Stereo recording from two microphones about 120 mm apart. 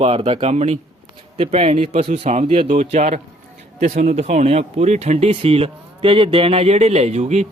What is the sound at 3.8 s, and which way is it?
Speech, 90° right.